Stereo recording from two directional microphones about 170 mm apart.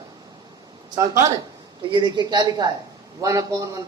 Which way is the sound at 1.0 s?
20° right (ahead or behind).